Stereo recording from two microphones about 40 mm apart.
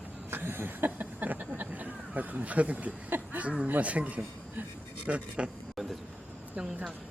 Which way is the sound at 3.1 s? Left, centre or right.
Right.